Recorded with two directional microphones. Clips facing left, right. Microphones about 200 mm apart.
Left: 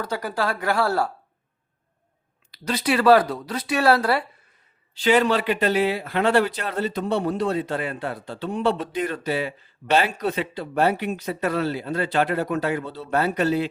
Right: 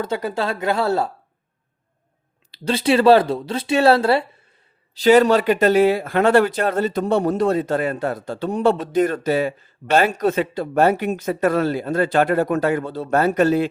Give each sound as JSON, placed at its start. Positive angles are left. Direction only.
{"t": 0.0, "sound": "speech", "side_deg": -25}
{"t": 2.5, "sound": "speech", "side_deg": -30}
{"t": 4.9, "sound": "speech", "side_deg": -40}